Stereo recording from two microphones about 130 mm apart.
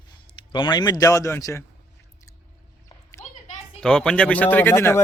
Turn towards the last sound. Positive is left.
turn(degrees=20)  # may be behind; listen again after turning